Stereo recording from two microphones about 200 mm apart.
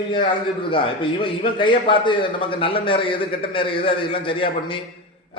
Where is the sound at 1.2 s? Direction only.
25° left (ahead or behind).